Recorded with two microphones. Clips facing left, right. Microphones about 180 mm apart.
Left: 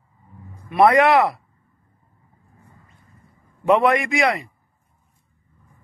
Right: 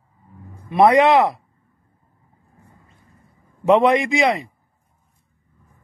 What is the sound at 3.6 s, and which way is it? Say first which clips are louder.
Speech: right 2 dB; 20° right (ahead or behind).